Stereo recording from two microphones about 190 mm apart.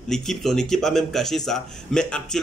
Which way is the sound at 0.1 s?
Centre (ahead or behind).